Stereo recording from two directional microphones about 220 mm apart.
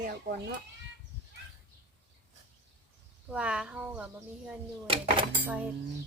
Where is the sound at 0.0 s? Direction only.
40° right (ahead or behind).